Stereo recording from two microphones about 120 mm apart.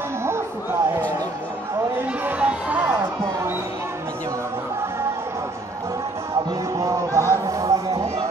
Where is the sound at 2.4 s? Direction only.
10° right (ahead or behind).